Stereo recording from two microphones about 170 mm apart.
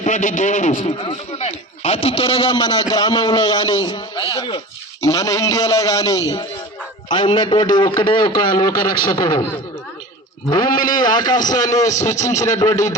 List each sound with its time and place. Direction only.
0.0 s a man's voice: 50° left (ahead or behind)
0.8 s a man's voice: 35° left (ahead or behind)
10.5 s a man's voice: 25° left (ahead or behind)